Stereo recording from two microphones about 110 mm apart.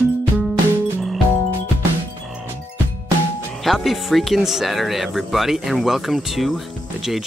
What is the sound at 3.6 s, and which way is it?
Speech, centre (ahead or behind).